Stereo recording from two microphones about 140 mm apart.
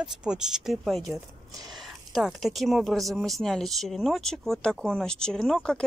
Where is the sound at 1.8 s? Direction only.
Centre (ahead or behind).